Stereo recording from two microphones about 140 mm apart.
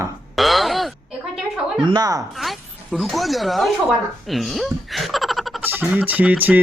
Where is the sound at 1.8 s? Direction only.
30° right (ahead or behind).